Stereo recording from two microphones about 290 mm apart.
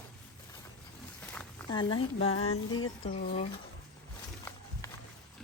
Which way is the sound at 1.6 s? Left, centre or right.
Centre.